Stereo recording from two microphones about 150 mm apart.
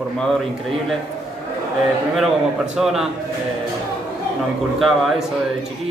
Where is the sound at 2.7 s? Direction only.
5° right (ahead or behind).